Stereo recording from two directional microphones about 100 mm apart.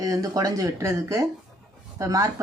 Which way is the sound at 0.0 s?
35° right (ahead or behind).